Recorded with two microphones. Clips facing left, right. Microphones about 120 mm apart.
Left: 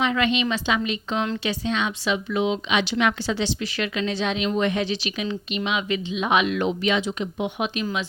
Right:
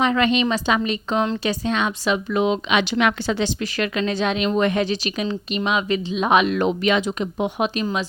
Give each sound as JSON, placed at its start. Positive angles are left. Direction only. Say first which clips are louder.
{"t": 0.0, "sound": "a woman's voice", "louder": "right 4 dB", "side_deg": -40}